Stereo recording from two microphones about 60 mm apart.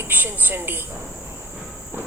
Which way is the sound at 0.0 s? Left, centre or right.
Right.